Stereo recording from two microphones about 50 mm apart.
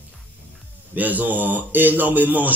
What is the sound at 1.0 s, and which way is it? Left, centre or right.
Speech, right.